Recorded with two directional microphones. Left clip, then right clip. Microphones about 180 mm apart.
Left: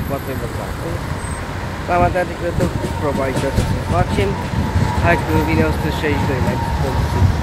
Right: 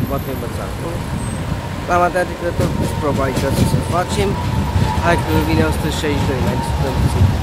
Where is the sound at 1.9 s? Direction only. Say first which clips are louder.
Right 1 dB; 15° right (ahead or behind).